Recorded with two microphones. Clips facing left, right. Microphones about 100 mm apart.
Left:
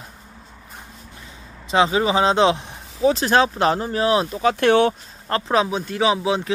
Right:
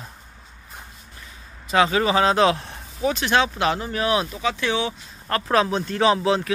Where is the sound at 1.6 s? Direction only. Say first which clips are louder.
Left 1 dB; 25° left (ahead or behind).